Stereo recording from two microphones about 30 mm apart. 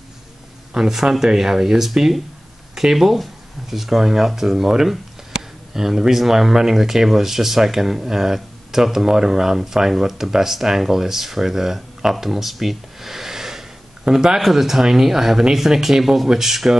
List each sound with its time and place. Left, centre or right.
0.7 s speech: centre
14.4 s speech: centre